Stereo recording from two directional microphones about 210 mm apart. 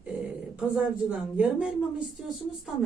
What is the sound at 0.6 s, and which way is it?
Speech, 5° right (ahead or behind).